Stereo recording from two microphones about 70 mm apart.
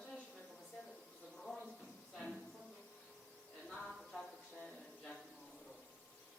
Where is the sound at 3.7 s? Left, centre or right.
Centre.